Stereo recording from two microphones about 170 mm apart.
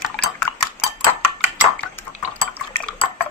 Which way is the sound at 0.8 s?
10° left (ahead or behind).